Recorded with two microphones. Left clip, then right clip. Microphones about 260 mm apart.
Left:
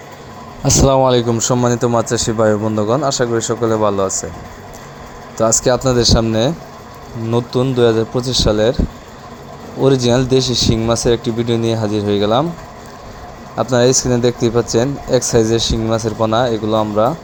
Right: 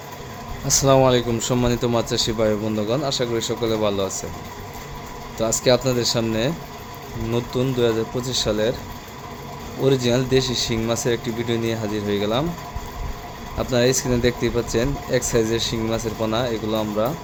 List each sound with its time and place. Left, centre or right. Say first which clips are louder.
0.6 s speech: left 4 dB; left; by 4.3 s centre
5.4 s speech: left 5 dB; centre
9.8 s speech: left 6 dB; centre
13.7 s speech: left 6 dB; centre